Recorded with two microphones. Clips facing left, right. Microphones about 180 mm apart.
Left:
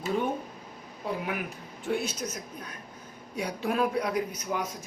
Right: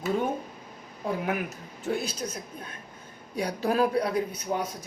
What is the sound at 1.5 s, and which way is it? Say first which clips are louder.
A man's voice: right 1 dB; 40° right (ahead or behind).